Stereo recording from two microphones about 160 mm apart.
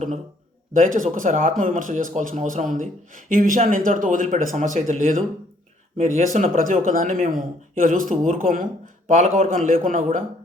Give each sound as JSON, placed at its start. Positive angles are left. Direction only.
{"t": 0.7, "sound": "a man's voice", "side_deg": -55}